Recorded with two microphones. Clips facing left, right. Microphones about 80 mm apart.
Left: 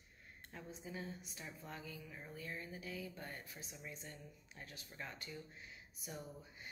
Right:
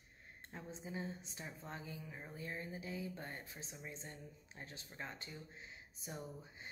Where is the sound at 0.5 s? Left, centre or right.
Right.